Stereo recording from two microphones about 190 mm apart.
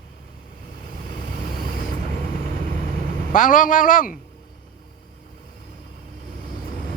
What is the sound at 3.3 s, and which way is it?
Speech, 45° left (ahead or behind).